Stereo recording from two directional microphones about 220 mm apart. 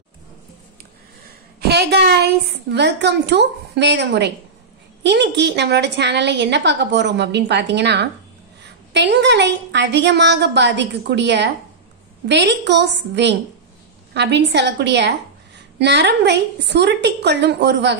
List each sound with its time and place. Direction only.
1.6 s a woman's voice: 50° right (ahead or behind)